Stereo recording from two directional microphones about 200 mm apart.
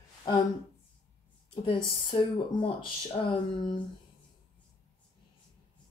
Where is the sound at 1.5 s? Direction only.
25° left (ahead or behind).